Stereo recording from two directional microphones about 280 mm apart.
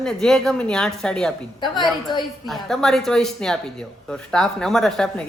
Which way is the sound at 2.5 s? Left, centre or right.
Centre.